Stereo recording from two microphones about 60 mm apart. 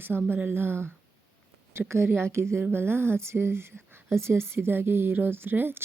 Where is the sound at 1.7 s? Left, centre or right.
Right.